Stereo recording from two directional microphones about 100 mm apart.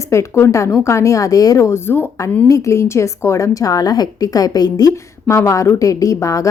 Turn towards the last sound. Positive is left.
turn(degrees=35)  # may be behind; listen again after turning